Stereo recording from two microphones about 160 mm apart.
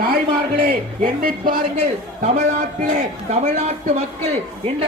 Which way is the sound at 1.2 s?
65° right (ahead or behind).